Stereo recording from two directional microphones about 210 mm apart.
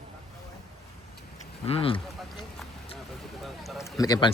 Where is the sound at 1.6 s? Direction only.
25° left (ahead or behind).